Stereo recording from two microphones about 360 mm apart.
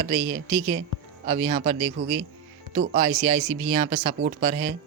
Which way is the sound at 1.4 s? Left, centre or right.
Right.